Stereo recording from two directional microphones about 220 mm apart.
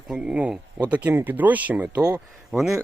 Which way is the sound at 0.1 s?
5° right (ahead or behind).